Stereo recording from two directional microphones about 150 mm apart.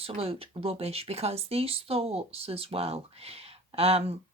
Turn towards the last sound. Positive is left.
turn(degrees=-40)  # may be behind; listen again after turning